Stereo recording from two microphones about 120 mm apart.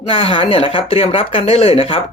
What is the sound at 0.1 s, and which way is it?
Speech, 50° left (ahead or behind).